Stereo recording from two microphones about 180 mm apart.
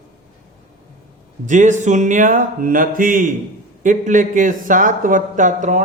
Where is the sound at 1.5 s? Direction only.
45° right (ahead or behind).